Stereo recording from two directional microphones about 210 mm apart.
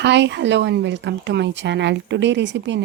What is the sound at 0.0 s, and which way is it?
Speech, 55° right (ahead or behind).